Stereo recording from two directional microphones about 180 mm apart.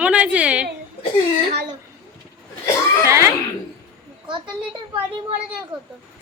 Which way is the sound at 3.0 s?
15° right (ahead or behind).